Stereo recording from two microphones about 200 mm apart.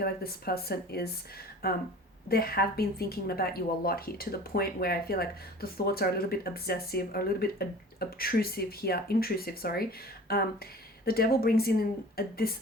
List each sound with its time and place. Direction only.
0.0 s speech: 50° left (ahead or behind)